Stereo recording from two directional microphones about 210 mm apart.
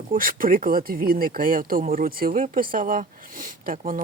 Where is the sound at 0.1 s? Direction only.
40° right (ahead or behind).